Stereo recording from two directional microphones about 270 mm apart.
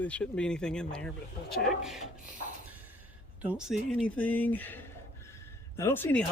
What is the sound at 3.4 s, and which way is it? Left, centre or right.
Speech, centre.